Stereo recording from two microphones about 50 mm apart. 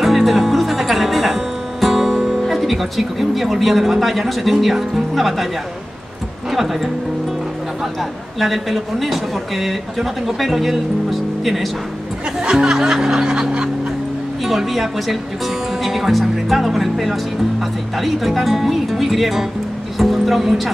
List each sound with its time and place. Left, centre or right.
0.0 s music: centre
6.5 s speech: centre
8.0 s speech: centre
12.4 s speech: centre
12.7 s music: centre
14.4 s speech: centre